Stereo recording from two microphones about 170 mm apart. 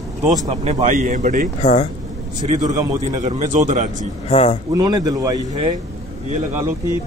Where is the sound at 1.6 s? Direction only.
45° left (ahead or behind).